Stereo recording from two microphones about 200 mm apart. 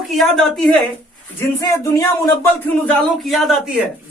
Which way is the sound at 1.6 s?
15° left (ahead or behind).